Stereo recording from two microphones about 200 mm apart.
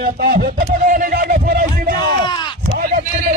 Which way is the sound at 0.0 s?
50° right (ahead or behind).